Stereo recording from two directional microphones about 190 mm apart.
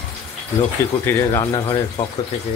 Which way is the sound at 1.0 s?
15° left (ahead or behind).